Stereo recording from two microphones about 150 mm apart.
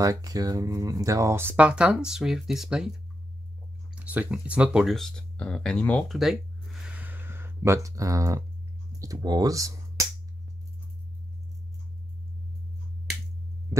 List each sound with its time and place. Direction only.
0.0 s speech: 25° right (ahead or behind); by 2.9 s 5° right (ahead or behind)
3.9 s speech: 10° right (ahead or behind)